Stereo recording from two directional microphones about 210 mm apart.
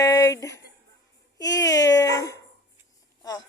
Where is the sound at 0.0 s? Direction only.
15° left (ahead or behind).